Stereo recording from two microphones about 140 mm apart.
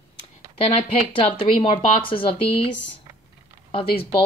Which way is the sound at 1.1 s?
40° left (ahead or behind).